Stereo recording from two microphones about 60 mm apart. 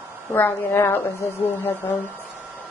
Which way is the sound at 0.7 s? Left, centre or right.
Left.